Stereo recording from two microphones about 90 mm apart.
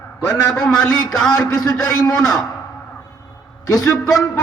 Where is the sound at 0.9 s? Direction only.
45° left (ahead or behind).